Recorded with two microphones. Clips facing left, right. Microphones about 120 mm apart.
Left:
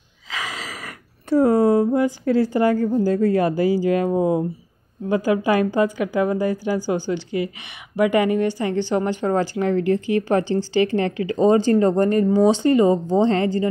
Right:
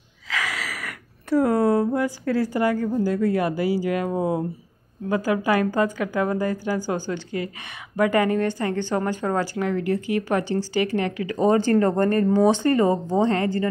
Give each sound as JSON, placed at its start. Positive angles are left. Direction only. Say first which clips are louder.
{"t": 0.3, "sound": "gasp", "louder": "right 1 dB", "side_deg": 20}
{"t": 2.5, "sound": "speech", "louder": "left 4 dB", "side_deg": 25}
{"t": 2.8, "sound": "speech", "louder": "left 4 dB", "side_deg": 35}
{"t": 4.1, "sound": "a woman's voice", "louder": "left 4 dB", "side_deg": 15}